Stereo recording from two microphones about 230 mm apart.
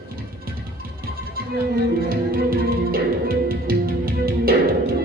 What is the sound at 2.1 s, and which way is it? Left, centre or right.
Music, right.